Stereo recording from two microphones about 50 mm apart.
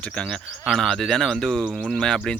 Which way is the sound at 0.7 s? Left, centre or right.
Centre.